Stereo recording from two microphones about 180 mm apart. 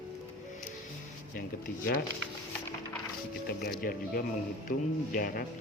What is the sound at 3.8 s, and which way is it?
A man's voice, 55° left (ahead or behind).